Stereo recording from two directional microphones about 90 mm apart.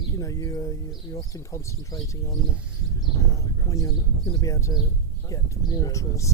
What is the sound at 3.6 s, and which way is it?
Speech, 40° left (ahead or behind).